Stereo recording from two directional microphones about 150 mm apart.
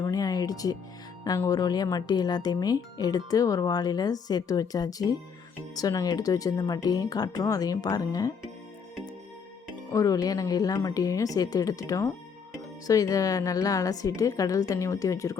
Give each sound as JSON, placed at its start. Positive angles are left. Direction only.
{"t": 0.0, "sound": "music", "side_deg": 25}
{"t": 1.5, "sound": "speech", "side_deg": 25}
{"t": 9.9, "sound": "speech", "side_deg": 20}